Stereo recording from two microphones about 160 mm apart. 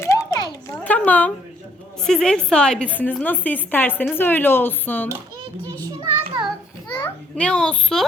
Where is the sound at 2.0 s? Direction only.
5° left (ahead or behind).